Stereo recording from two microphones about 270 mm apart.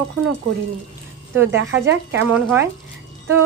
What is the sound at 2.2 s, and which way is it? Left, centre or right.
Speech, centre.